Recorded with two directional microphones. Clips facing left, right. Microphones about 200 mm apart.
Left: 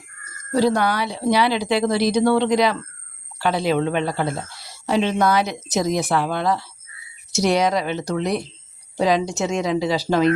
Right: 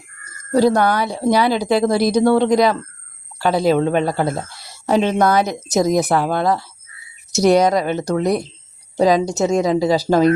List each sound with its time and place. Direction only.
0.5 s a woman's voice: 45° right (ahead or behind)